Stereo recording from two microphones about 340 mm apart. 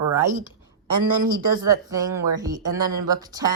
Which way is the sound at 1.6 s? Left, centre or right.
Centre.